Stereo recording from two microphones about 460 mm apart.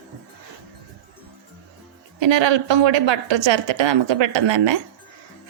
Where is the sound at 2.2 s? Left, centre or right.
Right.